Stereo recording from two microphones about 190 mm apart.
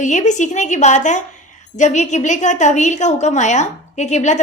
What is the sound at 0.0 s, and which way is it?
A woman's voice, 40° left (ahead or behind).